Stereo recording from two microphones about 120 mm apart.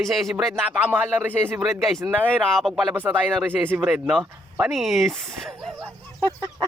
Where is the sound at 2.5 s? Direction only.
Centre (ahead or behind).